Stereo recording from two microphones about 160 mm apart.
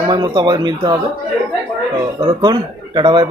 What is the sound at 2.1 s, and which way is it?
A man's voice, 25° right (ahead or behind).